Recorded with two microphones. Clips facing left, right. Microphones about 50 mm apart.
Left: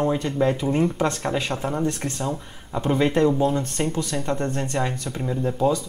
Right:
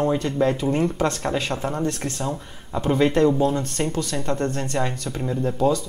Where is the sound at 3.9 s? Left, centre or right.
Centre.